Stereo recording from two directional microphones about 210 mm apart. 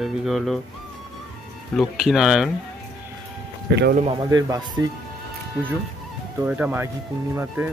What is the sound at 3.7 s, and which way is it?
Speech, 55° right (ahead or behind).